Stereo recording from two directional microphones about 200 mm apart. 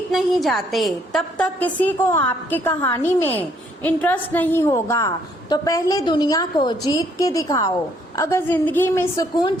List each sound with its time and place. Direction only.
0.1 s a woman's voice: centre (ahead or behind)